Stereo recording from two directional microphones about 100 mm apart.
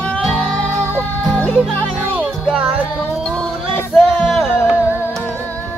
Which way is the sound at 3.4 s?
Centre (ahead or behind).